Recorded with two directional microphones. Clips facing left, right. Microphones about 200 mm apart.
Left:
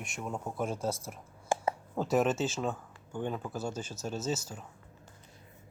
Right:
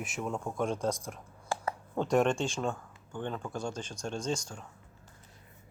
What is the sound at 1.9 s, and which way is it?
Speech, 5° left (ahead or behind).